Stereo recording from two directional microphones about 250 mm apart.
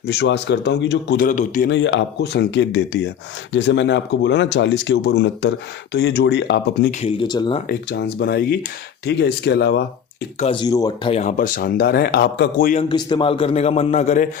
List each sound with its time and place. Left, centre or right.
0.1 s speech: left
1.7 s speech: left
7.0 s a man's voice: centre
7.7 s speech: left
10.4 s speech: centre; by 12.8 s left
12.9 s a man's voice: centre